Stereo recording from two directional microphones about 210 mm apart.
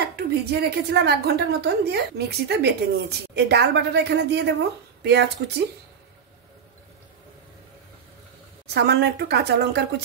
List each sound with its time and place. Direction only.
0.1 s a woman's voice: 50° right (ahead or behind)
8.6 s a woman's voice: 55° right (ahead or behind)